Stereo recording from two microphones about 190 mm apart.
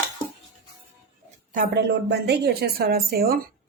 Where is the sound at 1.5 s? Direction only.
55° right (ahead or behind).